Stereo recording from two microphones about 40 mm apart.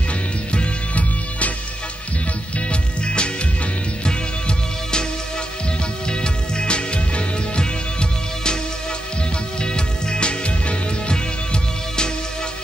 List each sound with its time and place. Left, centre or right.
0.5 s music: left
2.7 s music: left
6.0 s music: left
9.6 s music: left